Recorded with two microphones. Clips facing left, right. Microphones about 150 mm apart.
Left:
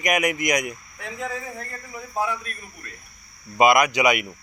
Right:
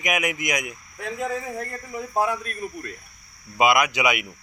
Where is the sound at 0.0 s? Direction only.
5° right (ahead or behind).